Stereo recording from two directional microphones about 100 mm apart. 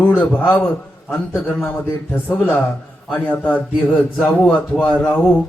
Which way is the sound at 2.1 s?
15° left (ahead or behind).